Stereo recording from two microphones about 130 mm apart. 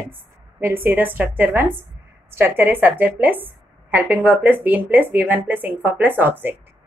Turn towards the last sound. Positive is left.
turn(degrees=-15)  # may be behind; listen again after turning